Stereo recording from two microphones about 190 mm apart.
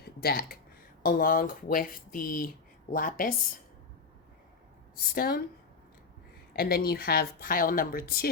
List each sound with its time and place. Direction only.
0.0 s speech: 55° left (ahead or behind)
5.1 s speech: 50° left (ahead or behind)
6.5 s speech: 50° left (ahead or behind)